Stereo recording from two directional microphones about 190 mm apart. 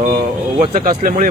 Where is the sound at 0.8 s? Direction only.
45° right (ahead or behind).